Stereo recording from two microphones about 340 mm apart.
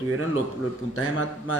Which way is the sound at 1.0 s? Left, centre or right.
Left.